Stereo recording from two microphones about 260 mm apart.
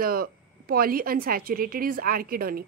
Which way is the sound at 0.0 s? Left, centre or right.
Right.